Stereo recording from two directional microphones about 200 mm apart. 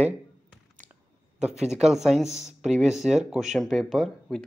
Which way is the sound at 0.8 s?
40° right (ahead or behind).